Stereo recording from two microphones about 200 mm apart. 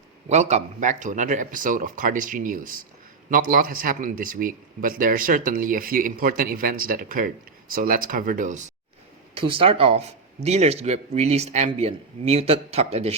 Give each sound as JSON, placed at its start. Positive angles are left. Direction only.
{"t": 0.3, "sound": "a man's voice", "side_deg": -35}
{"t": 9.3, "sound": "speech", "side_deg": -25}